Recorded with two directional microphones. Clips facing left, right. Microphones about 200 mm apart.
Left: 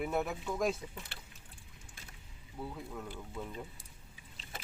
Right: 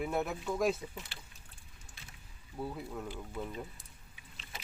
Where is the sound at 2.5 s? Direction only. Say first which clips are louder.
Right 3 dB; 5° right (ahead or behind).